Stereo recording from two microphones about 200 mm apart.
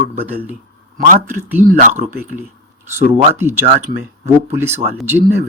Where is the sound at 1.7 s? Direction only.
40° right (ahead or behind).